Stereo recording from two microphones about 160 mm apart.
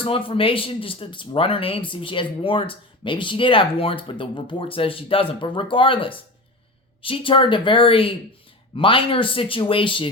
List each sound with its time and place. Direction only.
0.0 s speech: 35° left (ahead or behind)